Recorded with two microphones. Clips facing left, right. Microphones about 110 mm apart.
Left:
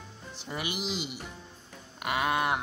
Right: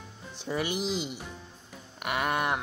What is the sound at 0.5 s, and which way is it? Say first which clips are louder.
Speech: right 5 dB; 5° left (ahead or behind).